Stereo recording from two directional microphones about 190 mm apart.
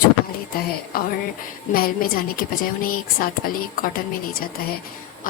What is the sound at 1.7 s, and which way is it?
Speech, 50° left (ahead or behind).